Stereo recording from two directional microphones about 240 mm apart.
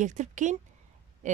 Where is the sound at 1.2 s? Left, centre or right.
Right.